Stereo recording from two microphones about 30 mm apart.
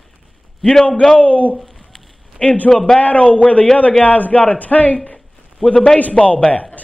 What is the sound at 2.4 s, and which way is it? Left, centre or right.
Speech, left.